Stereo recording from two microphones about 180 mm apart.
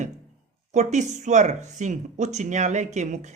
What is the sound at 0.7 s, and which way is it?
Speech, 40° right (ahead or behind).